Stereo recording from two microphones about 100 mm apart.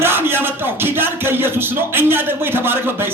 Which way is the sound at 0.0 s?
20° right (ahead or behind).